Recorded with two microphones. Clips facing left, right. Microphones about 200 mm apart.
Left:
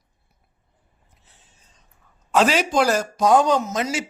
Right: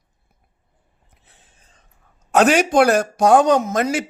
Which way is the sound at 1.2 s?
60° right (ahead or behind).